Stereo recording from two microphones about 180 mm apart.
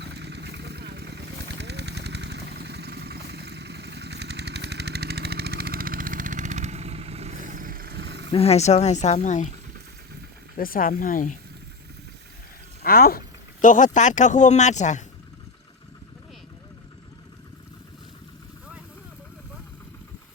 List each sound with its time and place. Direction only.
0.0 s vehicle: 70° right (ahead or behind)
8.3 s speech: 35° left (ahead or behind)
10.6 s speech: 50° left (ahead or behind)
12.8 s speech: 55° left (ahead or behind); by 15.0 s 40° left (ahead or behind)